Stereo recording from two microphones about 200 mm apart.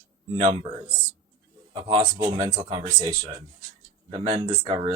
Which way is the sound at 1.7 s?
25° right (ahead or behind).